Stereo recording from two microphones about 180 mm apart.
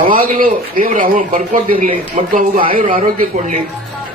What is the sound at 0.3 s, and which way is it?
Speech, 50° right (ahead or behind).